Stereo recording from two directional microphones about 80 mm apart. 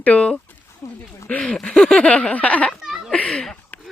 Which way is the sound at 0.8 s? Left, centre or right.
Left.